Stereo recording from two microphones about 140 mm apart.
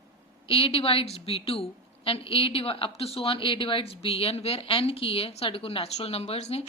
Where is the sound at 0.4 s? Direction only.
40° left (ahead or behind).